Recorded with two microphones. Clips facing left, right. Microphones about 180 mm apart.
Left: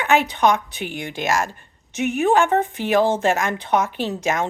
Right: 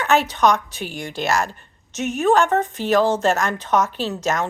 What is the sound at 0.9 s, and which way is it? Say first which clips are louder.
Speech: right 1 dB; 60° left (ahead or behind).